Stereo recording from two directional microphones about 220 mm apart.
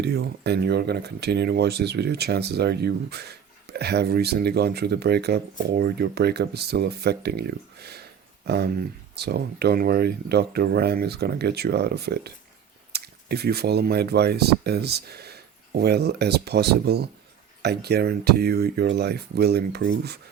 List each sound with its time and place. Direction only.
0.0 s speech: 45° right (ahead or behind)